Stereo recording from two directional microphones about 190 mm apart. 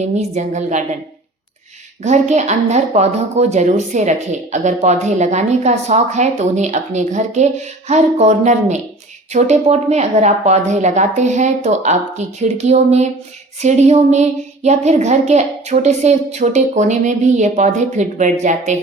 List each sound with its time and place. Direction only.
0.0 s speech: 35° right (ahead or behind)
2.0 s speech: 35° right (ahead or behind)